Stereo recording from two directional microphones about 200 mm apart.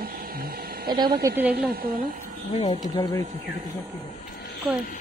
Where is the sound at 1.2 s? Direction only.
10° right (ahead or behind).